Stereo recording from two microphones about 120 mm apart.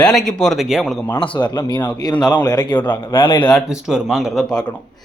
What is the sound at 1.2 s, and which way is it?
Speech, 40° left (ahead or behind).